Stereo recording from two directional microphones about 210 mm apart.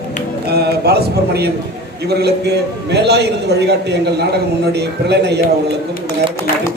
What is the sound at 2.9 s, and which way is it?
A man's voice, 50° right (ahead or behind).